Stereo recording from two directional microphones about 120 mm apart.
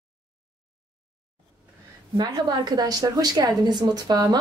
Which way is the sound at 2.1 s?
35° right (ahead or behind).